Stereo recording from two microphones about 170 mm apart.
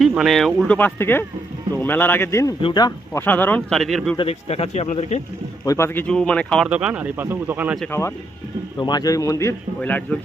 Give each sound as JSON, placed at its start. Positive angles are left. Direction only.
{"t": 0.0, "sound": "a man's voice", "side_deg": 0}
{"t": 3.1, "sound": "speech", "side_deg": 10}
{"t": 4.2, "sound": "speech", "side_deg": 40}
{"t": 5.6, "sound": "speech", "side_deg": 15}
{"t": 6.7, "sound": "speech", "side_deg": -5}
{"t": 7.9, "sound": "a man's voice", "side_deg": 15}